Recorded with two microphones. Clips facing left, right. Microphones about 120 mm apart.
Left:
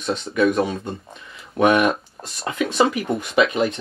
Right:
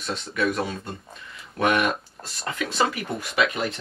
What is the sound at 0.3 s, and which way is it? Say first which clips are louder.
Speech: left 6 dB; 20° left (ahead or behind).